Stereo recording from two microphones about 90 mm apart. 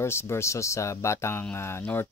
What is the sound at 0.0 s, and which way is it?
Speech, 30° left (ahead or behind).